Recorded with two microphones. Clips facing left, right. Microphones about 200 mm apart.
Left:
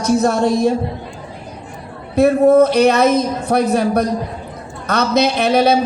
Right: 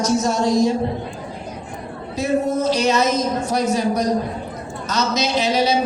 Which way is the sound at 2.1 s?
60° left (ahead or behind).